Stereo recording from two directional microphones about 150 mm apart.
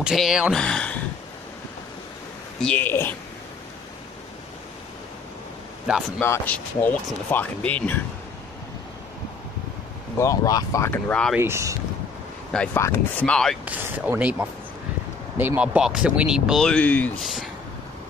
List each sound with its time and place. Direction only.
0.0 s speech: 5° right (ahead or behind)
2.6 s speech: 10° left (ahead or behind)
6.1 s speech: 15° left (ahead or behind)
10.1 s speech: 20° left (ahead or behind)
11.3 s speech: 15° right (ahead or behind)
12.5 s speech: 15° left (ahead or behind)
13.7 s speech: 10° right (ahead or behind); by 17.1 s 10° left (ahead or behind)
17.2 s speech: centre (ahead or behind)